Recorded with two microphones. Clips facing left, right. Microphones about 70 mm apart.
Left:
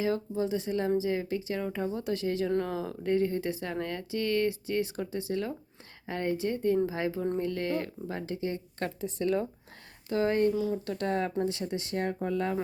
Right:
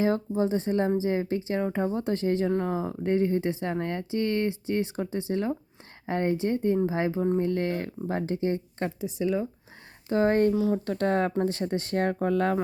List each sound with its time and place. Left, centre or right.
0.0 s speech: right
9.0 s speech: centre
10.1 s speech: right